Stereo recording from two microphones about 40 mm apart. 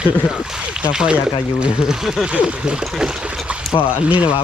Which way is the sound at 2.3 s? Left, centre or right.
Right.